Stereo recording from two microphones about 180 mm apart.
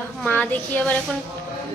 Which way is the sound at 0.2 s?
10° left (ahead or behind).